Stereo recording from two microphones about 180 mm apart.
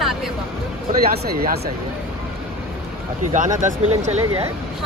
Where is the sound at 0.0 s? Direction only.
Centre (ahead or behind).